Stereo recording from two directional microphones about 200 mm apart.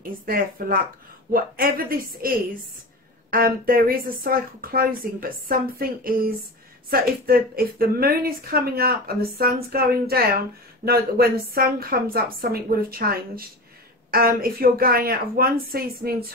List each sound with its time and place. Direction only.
0.0 s speech: 45° right (ahead or behind)